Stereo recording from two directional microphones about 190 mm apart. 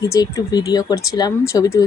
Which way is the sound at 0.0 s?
15° left (ahead or behind).